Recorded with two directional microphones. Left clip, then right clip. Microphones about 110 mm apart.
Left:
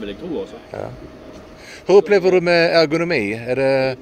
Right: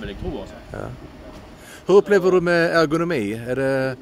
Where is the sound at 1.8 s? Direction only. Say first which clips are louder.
Left 2 dB; 60° right (ahead or behind).